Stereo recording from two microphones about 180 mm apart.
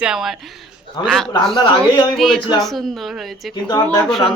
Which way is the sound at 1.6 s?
25° left (ahead or behind).